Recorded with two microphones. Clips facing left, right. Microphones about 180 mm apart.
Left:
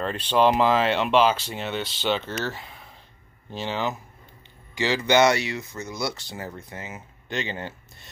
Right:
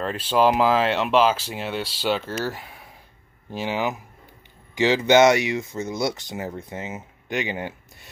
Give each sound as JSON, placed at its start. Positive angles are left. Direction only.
{"t": 0.0, "sound": "speech", "side_deg": -5}